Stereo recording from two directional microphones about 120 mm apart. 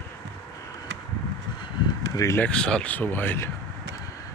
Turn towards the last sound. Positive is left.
turn(degrees=20)  # may be behind; listen again after turning